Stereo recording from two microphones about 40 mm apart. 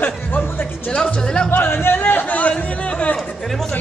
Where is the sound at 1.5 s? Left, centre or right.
Left.